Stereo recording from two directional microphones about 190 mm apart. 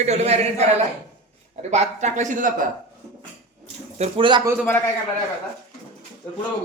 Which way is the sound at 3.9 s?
30° right (ahead or behind).